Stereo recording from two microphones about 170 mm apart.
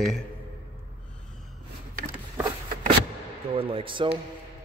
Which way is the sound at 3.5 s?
30° right (ahead or behind).